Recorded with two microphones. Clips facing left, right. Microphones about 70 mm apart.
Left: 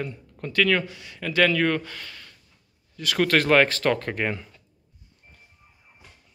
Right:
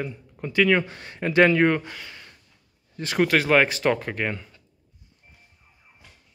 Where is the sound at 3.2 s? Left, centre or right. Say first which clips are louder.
Even; centre.